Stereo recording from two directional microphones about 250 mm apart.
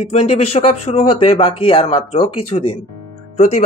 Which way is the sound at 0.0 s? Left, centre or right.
Left.